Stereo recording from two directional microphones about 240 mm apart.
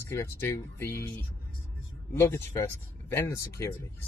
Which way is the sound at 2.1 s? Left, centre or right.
Centre.